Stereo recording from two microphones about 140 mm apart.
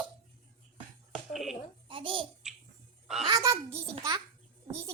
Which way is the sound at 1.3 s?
Centre (ahead or behind).